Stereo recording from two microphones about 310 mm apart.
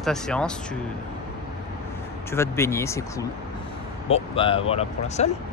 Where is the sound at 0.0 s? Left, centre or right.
Centre.